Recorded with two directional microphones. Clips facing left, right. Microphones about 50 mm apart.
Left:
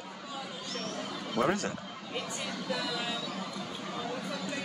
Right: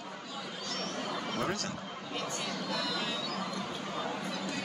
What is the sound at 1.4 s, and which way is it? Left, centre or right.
Speech, centre.